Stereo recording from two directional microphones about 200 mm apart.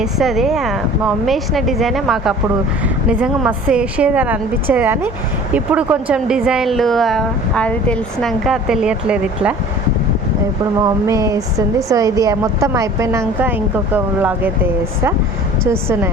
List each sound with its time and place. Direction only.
0.0 s a woman's voice: centre (ahead or behind)
10.8 s a woman's voice: 15° right (ahead or behind)